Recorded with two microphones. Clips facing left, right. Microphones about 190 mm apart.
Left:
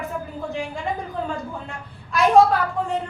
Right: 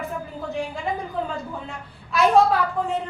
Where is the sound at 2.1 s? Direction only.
Centre (ahead or behind).